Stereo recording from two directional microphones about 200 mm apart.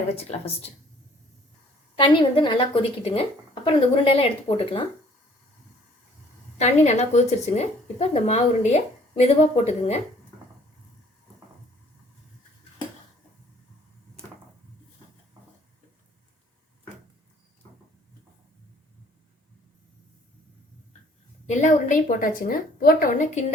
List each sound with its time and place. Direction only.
0.2 s speech: 30° left (ahead or behind)
2.0 s a woman's voice: 25° left (ahead or behind)
6.6 s speech: 35° left (ahead or behind)
21.4 s speech: 35° left (ahead or behind)